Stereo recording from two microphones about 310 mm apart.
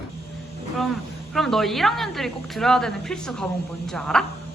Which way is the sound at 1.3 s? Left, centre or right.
Centre.